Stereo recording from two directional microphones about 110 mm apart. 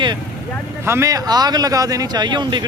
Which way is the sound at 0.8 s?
25° right (ahead or behind).